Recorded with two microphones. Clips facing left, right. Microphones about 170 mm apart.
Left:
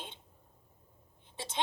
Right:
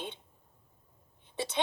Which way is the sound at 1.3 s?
70° right (ahead or behind).